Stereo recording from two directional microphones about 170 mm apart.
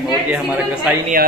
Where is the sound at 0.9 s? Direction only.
5° right (ahead or behind).